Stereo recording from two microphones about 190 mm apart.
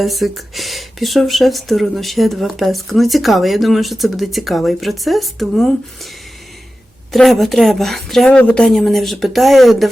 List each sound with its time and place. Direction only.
0.0 s speech: centre (ahead or behind)
7.1 s speech: centre (ahead or behind)